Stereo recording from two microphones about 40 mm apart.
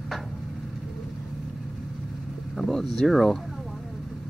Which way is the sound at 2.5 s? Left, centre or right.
Centre.